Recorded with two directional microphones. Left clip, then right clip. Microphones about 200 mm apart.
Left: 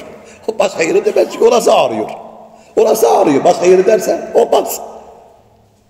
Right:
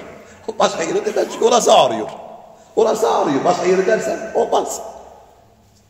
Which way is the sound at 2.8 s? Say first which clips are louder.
Left 6 dB; 25° left (ahead or behind).